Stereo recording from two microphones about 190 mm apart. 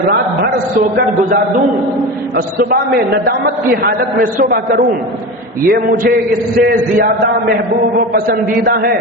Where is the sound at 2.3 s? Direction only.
55° right (ahead or behind).